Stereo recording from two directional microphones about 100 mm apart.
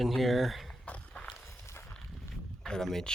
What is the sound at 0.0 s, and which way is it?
Speech, centre (ahead or behind).